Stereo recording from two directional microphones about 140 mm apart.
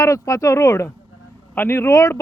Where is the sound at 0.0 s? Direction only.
20° left (ahead or behind).